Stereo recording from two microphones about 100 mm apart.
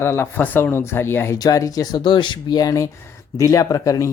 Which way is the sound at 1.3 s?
35° left (ahead or behind).